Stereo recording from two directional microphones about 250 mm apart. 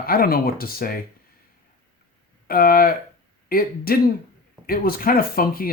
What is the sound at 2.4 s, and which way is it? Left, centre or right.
Speech, left.